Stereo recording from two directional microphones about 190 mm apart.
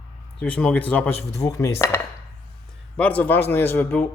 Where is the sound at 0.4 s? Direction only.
5° left (ahead or behind).